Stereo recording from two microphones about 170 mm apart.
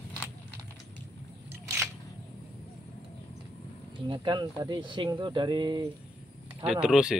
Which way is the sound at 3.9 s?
25° right (ahead or behind).